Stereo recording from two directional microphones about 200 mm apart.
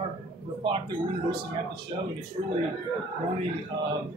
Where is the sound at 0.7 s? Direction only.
25° right (ahead or behind).